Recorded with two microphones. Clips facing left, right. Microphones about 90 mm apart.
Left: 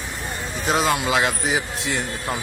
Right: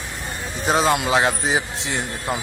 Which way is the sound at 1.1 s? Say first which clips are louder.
Right 2 dB; 30° right (ahead or behind).